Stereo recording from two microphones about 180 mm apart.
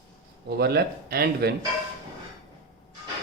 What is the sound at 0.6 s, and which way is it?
Speech, 60° right (ahead or behind).